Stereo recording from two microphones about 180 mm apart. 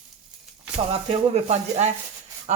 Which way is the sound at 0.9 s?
35° right (ahead or behind).